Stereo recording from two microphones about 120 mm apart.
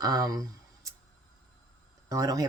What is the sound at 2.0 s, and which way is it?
Speech, 30° right (ahead or behind).